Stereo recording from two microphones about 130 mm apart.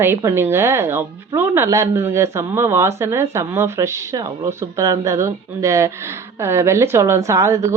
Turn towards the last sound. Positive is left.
turn(degrees=-20)  # may be behind; listen again after turning